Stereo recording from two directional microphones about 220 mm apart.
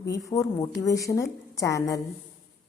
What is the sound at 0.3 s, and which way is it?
A woman's voice, 15° left (ahead or behind).